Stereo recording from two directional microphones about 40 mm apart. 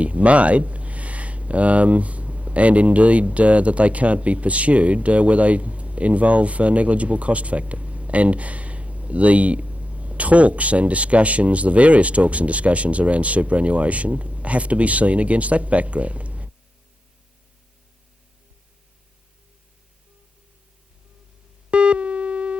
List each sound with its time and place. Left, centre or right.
0.0 s speech: right
21.7 s busy signal: right